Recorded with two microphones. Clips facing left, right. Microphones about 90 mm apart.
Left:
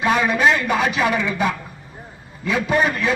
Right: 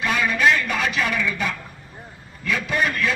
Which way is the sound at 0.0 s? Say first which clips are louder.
Left 3 dB; 25° left (ahead or behind).